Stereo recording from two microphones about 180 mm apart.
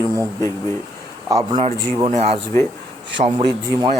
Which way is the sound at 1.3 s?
20° right (ahead or behind).